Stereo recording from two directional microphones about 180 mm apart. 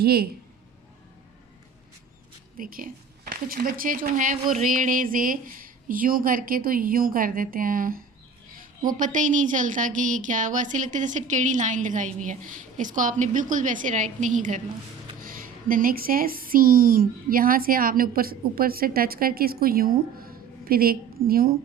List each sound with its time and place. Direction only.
0.0 s speech: 60° right (ahead or behind)
2.6 s a woman's voice: 50° right (ahead or behind)